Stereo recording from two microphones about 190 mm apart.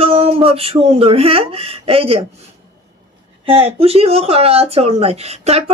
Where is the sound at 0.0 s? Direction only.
30° right (ahead or behind).